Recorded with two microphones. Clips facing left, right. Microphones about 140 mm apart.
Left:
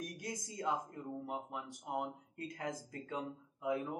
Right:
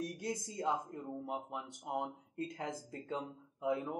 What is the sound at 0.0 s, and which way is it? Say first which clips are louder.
A woman's voice: right 4 dB; 25° right (ahead or behind).